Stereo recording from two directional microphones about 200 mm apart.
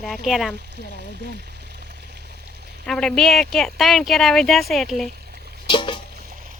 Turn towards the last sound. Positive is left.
turn(degrees=25)  # may be behind; listen again after turning